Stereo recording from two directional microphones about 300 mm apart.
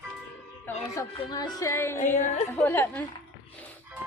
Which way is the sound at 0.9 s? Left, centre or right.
Centre.